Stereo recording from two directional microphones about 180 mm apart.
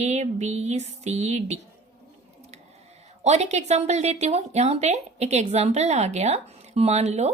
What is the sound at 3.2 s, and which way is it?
A woman's voice, 40° right (ahead or behind).